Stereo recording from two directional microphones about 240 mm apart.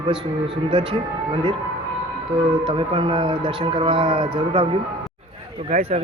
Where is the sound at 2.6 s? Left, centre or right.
Right.